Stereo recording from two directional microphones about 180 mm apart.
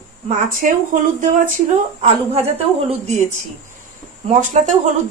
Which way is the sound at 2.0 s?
35° right (ahead or behind).